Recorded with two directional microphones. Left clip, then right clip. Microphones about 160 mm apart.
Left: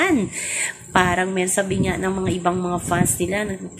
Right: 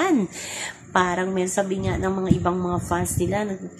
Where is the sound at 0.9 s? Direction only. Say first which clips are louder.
Left 3 dB; 10° right (ahead or behind).